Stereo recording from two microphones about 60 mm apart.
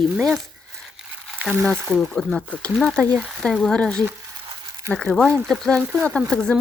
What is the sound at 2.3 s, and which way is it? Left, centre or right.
Speech, centre.